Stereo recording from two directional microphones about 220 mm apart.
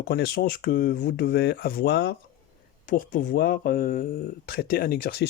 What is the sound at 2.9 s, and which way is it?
Speech, 40° left (ahead or behind).